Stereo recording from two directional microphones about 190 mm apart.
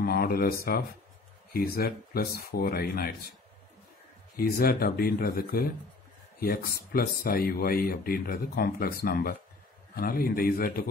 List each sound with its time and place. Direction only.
0.0 s speech: 50° left (ahead or behind)
4.4 s speech: 50° left (ahead or behind)